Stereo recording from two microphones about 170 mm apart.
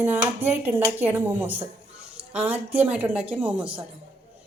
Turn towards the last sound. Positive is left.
turn(degrees=-5)  # may be behind; listen again after turning